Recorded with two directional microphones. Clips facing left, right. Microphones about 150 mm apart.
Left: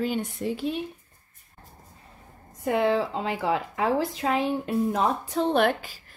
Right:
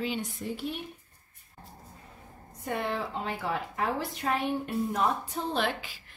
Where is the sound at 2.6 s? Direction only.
90° left.